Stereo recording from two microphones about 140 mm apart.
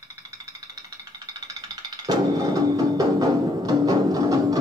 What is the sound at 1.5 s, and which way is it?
Music, 25° right (ahead or behind).